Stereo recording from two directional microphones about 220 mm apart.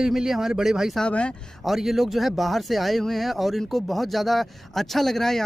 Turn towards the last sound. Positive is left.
turn(degrees=0)  # may be behind; listen again after turning